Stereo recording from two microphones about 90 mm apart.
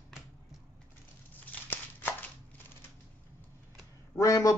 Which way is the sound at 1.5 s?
20° left (ahead or behind).